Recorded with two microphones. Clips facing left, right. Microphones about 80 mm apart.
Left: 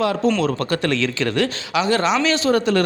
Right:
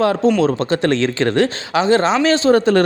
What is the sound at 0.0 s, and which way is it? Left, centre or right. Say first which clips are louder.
Speech: right 4 dB; right.